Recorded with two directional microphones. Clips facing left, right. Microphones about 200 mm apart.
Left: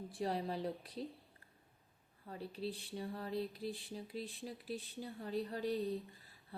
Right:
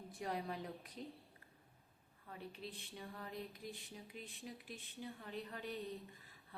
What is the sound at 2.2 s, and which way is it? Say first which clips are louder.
Speech: left 7 dB; 35° left (ahead or behind).